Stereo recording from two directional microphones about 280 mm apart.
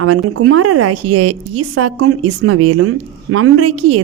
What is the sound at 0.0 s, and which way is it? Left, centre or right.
A woman's voice, right.